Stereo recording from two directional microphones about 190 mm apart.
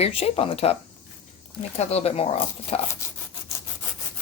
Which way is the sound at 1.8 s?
35° left (ahead or behind).